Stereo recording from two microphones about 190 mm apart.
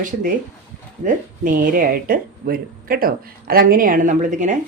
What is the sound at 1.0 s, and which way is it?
Speech, 45° right (ahead or behind).